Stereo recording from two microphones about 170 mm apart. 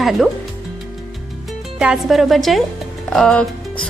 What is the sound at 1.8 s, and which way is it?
A woman's voice, 5° right (ahead or behind).